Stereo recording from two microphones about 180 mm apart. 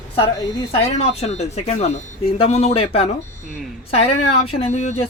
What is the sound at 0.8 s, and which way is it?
Speech, 35° left (ahead or behind).